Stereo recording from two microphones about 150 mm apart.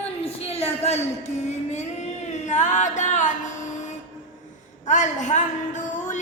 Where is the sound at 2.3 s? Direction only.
55° left (ahead or behind).